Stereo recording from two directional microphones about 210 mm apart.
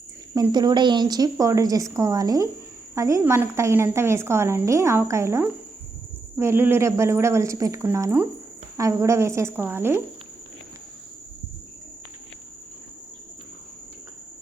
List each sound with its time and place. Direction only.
0.3 s a woman's voice: 20° right (ahead or behind)